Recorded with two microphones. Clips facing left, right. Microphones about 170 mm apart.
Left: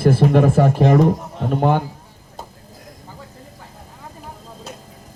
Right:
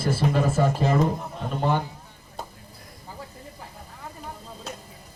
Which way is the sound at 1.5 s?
55° left (ahead or behind).